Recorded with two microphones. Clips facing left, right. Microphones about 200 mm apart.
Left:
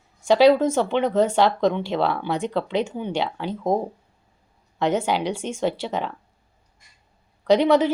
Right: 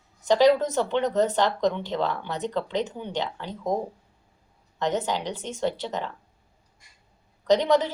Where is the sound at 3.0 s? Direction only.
80° left.